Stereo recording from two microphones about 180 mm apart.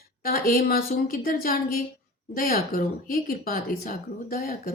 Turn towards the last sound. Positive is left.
turn(degrees=55)  # may be behind; listen again after turning